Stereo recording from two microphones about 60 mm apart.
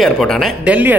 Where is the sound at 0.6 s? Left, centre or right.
Right.